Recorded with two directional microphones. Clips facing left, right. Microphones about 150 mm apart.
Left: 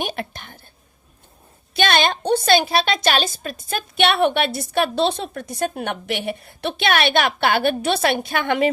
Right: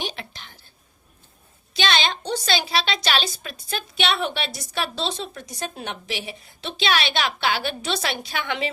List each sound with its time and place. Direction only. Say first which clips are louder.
0.0 s a woman's voice: left 6 dB; 50° left (ahead or behind)
1.7 s a woman's voice: left 5 dB; 55° left (ahead or behind)